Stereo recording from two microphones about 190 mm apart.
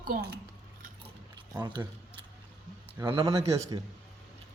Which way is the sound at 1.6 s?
25° right (ahead or behind).